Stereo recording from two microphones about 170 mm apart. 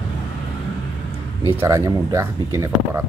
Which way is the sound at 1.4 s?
15° right (ahead or behind).